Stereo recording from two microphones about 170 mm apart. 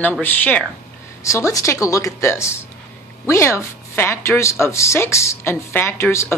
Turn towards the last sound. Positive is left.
turn(degrees=15)  # may be behind; listen again after turning